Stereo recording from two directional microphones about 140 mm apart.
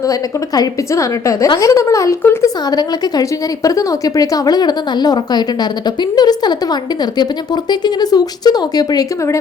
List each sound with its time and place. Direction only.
0.0 s a woman's voice: 25° left (ahead or behind)